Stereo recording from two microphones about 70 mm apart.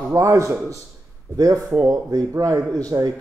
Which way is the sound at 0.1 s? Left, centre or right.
Right.